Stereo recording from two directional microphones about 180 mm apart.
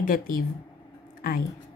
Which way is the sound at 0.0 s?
50° left (ahead or behind).